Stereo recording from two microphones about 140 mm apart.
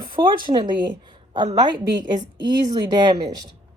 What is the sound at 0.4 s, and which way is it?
A woman's voice, 30° right (ahead or behind).